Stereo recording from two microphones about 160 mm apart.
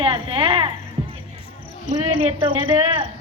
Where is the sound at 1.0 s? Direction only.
40° right (ahead or behind).